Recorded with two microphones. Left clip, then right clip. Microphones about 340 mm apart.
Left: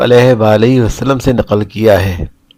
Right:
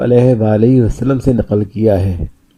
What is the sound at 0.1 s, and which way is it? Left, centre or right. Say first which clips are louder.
Speech: left 3 dB; left.